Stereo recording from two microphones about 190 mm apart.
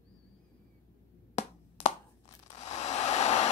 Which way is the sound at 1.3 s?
35° left (ahead or behind).